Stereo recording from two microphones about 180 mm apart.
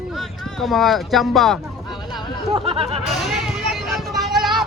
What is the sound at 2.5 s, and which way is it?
Speech, 30° right (ahead or behind).